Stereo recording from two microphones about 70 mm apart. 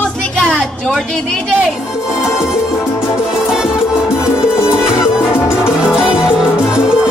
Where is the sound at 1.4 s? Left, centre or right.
Centre.